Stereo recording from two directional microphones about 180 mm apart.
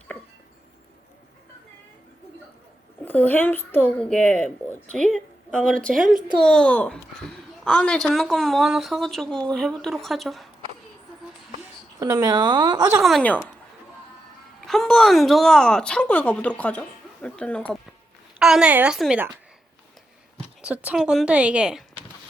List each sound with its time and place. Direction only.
3.0 s speech: 10° left (ahead or behind)
11.9 s a woman's voice: 20° right (ahead or behind)
13.0 s speech: centre (ahead or behind)
14.7 s speech: centre (ahead or behind)
20.6 s speech: 5° right (ahead or behind)